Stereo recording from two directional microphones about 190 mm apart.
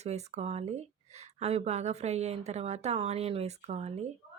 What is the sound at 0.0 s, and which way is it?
Speech, 35° right (ahead or behind).